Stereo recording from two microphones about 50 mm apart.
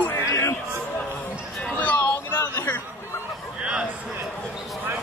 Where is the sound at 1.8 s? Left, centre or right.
Left.